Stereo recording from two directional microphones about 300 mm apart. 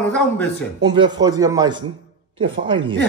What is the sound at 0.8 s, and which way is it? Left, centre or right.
Speech, centre.